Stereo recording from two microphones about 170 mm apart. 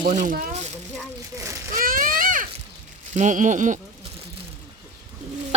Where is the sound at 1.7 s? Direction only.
55° right (ahead or behind).